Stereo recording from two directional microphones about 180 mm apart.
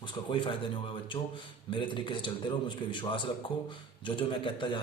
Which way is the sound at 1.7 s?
25° left (ahead or behind).